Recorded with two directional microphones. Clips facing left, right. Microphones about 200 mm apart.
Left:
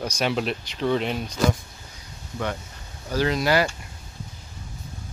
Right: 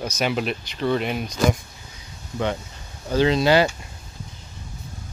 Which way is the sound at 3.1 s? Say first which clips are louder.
Right 4 dB; 25° right (ahead or behind).